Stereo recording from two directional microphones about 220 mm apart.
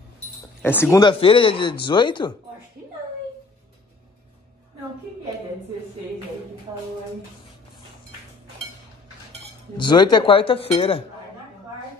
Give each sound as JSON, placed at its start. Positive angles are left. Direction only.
{"t": 0.6, "sound": "speech", "side_deg": 10}
{"t": 9.8, "sound": "speech", "side_deg": 20}